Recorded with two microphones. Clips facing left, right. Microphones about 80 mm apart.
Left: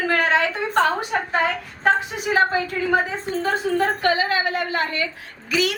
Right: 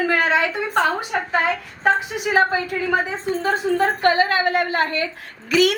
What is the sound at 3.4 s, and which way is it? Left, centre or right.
A woman's voice, right.